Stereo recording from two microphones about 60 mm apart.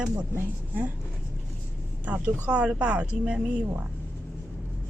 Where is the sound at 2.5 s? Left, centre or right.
Centre.